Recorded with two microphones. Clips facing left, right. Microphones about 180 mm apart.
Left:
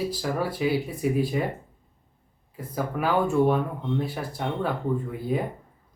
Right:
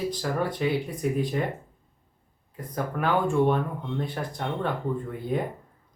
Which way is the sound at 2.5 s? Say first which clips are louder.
Left 1 dB; 5° left (ahead or behind).